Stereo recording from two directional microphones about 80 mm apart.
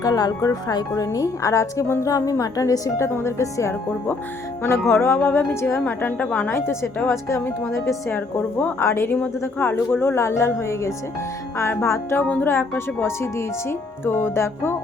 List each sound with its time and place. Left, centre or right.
0.0 s speech: left
4.9 s a woman's voice: left
7.1 s a woman's voice: left